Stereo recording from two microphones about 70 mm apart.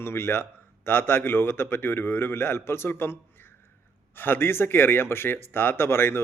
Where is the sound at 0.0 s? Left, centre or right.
Left.